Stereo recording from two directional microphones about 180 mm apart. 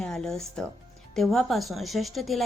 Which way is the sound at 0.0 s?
Centre (ahead or behind).